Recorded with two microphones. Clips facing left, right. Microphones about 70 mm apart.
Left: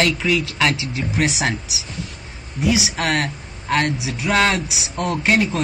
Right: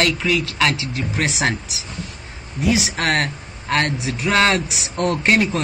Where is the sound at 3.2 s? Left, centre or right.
Centre.